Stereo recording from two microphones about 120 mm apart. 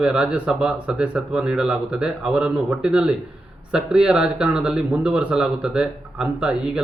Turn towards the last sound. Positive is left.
turn(degrees=-5)  # may be behind; listen again after turning